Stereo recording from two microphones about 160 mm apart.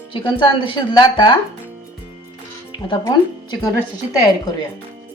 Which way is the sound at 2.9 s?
25° left (ahead or behind).